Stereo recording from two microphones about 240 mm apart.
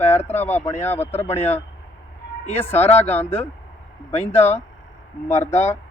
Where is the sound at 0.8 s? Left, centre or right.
Centre.